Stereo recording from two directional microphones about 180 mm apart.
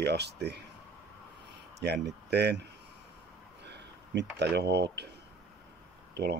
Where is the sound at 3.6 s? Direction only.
70° right (ahead or behind).